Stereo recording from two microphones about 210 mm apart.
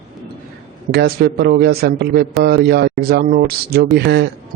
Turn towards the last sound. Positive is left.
turn(degrees=-50)  # may be behind; listen again after turning